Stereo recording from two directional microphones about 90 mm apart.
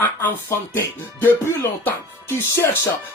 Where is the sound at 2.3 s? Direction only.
25° left (ahead or behind).